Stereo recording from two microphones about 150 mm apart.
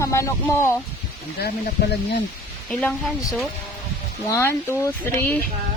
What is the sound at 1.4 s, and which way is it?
Speech, 90° left.